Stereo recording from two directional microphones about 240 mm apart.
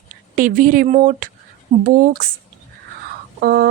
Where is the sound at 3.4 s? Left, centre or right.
Right.